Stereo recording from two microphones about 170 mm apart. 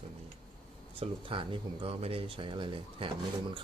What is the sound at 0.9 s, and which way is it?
Speech, 30° right (ahead or behind).